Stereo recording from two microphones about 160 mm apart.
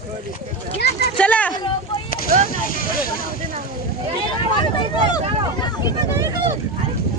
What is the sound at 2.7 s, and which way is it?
Vehicle, 60° left (ahead or behind).